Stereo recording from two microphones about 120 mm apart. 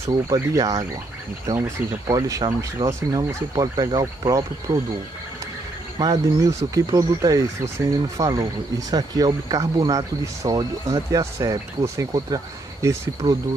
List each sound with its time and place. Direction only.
0.1 s speech: 30° right (ahead or behind)
4.7 s speech: 40° right (ahead or behind)
5.9 s speech: 30° right (ahead or behind)